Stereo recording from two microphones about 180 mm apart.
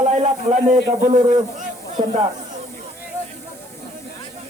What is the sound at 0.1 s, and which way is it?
A man's voice, 40° right (ahead or behind).